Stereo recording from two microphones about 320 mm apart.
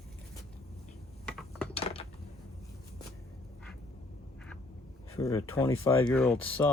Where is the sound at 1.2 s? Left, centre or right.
Centre.